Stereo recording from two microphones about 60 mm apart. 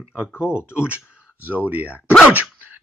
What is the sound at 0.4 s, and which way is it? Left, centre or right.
Speech, centre.